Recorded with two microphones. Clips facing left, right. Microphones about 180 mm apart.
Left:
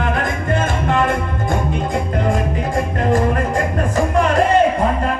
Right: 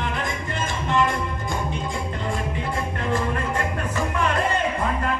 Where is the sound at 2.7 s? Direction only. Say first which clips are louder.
Left 9 dB; 45° left (ahead or behind).